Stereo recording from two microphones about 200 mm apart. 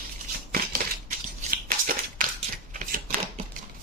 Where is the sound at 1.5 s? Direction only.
45° right (ahead or behind).